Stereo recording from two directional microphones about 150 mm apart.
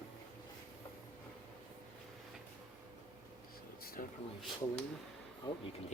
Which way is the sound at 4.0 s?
80° left.